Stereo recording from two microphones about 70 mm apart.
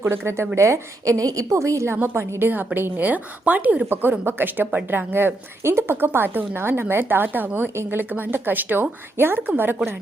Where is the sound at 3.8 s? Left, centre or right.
Right.